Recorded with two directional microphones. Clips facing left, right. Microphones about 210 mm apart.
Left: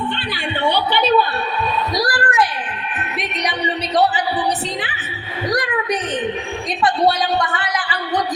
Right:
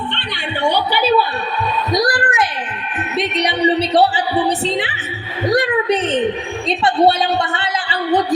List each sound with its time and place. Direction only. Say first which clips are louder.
0.1 s music: left 2 dB; 5° left (ahead or behind)
0.6 s a woman's voice: right 1 dB; 10° right (ahead or behind)
1.9 s a sound: right 3 dB; 20° right (ahead or behind)
3.2 s a woman's voice: right 7 dB; 30° right (ahead or behind)